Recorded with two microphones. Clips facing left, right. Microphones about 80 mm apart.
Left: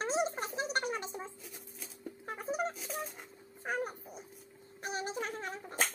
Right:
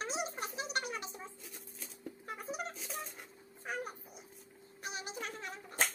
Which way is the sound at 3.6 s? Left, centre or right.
Left.